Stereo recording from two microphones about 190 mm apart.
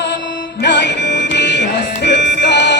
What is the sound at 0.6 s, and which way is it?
Music, 65° left (ahead or behind).